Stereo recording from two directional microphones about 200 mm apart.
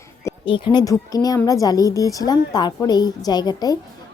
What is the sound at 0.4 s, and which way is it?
A woman's voice, 25° left (ahead or behind).